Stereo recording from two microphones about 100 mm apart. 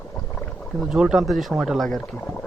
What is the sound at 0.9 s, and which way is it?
Speech, 5° right (ahead or behind).